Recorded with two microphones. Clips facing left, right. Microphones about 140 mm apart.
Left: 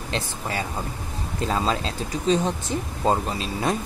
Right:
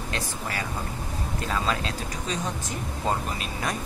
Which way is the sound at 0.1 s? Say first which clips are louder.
Left 5 dB; 25° left (ahead or behind).